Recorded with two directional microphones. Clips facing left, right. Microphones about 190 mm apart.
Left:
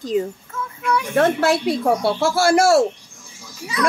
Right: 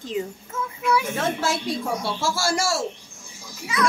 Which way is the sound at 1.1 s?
60° left (ahead or behind).